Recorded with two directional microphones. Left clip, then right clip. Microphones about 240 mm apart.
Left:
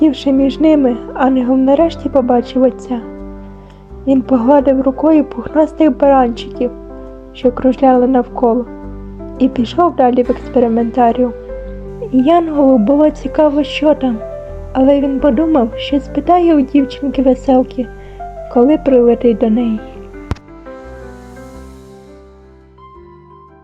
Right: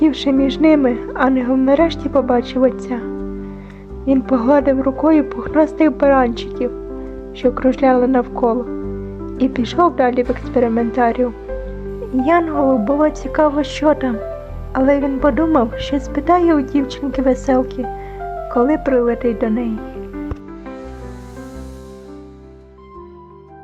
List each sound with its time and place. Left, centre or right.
0.0 s speech: centre
4.0 s a woman's voice: centre